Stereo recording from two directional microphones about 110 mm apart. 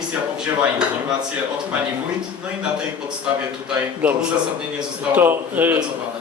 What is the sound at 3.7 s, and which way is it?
Speech, 10° right (ahead or behind).